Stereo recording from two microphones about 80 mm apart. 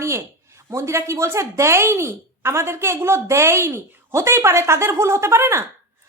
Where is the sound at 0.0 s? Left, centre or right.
Right.